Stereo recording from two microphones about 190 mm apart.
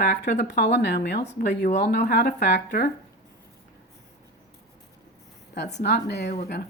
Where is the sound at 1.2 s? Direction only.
35° left (ahead or behind).